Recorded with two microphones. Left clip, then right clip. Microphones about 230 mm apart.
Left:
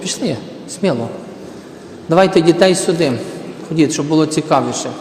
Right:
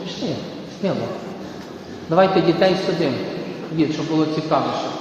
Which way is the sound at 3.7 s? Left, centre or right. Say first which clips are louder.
Left 7 dB; left.